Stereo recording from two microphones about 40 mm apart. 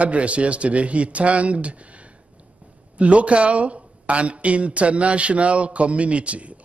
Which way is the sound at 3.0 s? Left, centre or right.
Right.